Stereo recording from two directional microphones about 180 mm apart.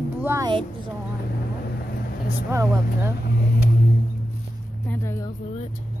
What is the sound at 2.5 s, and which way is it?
Speech, 15° right (ahead or behind).